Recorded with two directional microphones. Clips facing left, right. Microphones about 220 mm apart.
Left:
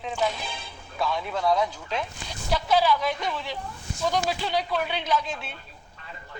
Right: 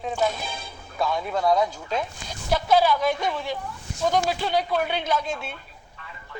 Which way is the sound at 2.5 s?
50° right (ahead or behind).